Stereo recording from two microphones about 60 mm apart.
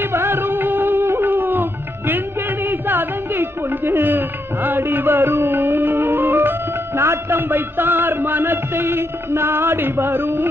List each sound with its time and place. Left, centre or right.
0.0 s music: right